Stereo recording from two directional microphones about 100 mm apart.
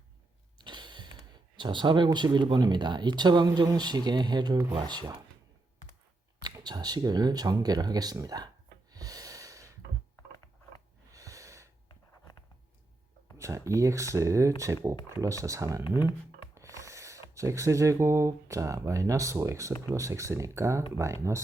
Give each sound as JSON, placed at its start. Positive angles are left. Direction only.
{"t": 0.6, "sound": "mechanisms", "side_deg": -50}
{"t": 1.5, "sound": "speech", "side_deg": -50}
{"t": 6.4, "sound": "speech", "side_deg": -45}
{"t": 8.9, "sound": "a sound", "side_deg": -40}
{"t": 11.1, "sound": "gasp", "side_deg": -35}
{"t": 13.3, "sound": "speech", "side_deg": -30}